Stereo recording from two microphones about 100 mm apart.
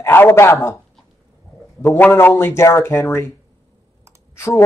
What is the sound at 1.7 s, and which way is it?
Speech, 25° left (ahead or behind).